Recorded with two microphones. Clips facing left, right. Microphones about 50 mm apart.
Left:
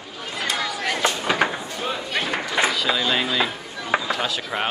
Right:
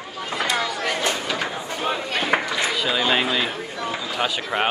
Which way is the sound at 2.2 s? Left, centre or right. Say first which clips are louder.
Even; right.